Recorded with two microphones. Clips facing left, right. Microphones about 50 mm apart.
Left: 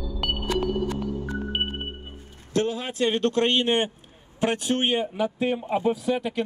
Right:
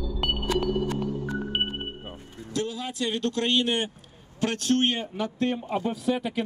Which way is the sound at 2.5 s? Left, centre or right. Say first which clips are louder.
Left 5 dB; left.